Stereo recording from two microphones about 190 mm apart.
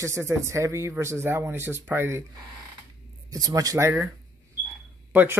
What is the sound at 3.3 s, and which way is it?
Speech, 20° right (ahead or behind).